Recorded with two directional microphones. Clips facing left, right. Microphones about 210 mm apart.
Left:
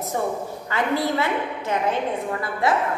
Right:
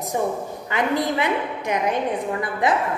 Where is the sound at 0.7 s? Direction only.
15° right (ahead or behind).